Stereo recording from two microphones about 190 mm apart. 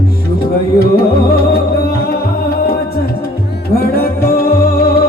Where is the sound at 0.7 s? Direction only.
55° left (ahead or behind).